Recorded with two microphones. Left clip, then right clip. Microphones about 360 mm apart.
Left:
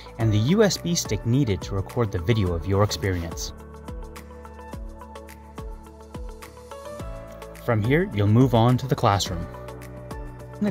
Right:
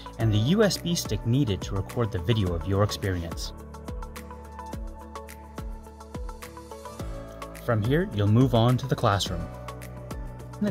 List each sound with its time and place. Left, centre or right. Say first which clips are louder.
0.2 s speech: left 3 dB; centre
7.9 s speech: left 6 dB; centre
10.6 s music: left 2 dB; centre